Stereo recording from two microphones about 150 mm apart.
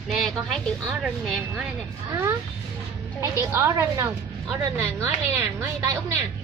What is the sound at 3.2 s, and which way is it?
A woman's voice, 20° right (ahead or behind).